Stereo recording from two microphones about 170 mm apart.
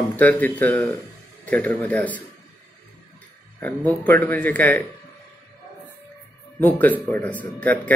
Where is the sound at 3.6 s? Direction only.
10° left (ahead or behind).